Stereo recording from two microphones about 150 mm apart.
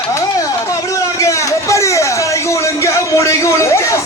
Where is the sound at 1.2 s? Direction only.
20° left (ahead or behind).